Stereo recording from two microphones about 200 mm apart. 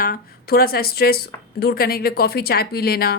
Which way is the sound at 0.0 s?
50° left (ahead or behind).